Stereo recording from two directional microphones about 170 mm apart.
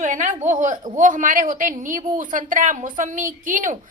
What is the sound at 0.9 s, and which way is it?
A woman's voice, 50° right (ahead or behind).